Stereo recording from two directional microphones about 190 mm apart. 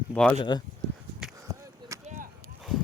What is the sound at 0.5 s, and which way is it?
Speech, 20° left (ahead or behind).